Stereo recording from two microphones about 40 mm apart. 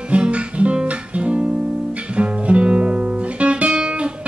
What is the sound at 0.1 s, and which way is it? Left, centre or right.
Guitar, right.